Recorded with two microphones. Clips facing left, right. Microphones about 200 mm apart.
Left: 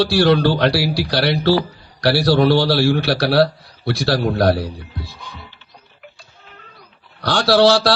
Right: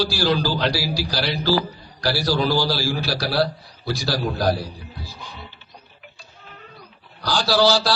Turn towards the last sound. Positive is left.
turn(degrees=75)  # may be behind; listen again after turning